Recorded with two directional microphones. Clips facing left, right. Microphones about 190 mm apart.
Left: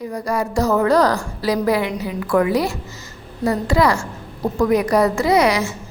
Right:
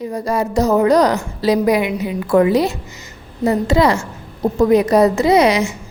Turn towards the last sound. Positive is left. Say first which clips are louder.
# right 3 dB
turn(degrees=-20)  # may be behind; listen again after turning